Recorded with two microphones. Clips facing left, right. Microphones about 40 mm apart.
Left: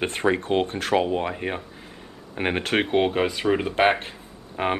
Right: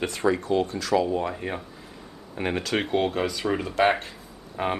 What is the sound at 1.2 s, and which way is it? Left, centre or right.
Speech, left.